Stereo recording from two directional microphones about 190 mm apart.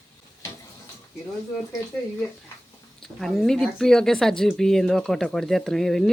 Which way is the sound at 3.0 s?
Centre (ahead or behind).